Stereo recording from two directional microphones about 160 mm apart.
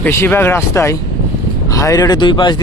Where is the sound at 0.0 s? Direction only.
15° left (ahead or behind).